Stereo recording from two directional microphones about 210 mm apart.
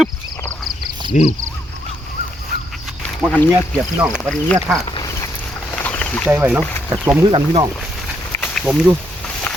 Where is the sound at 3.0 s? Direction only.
5° left (ahead or behind).